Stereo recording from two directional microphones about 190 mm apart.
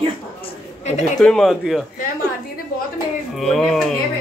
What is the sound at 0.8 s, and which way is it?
Speech, 40° left (ahead or behind).